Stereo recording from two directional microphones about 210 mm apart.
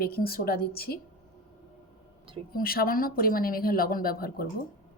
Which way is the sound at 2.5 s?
45° left (ahead or behind).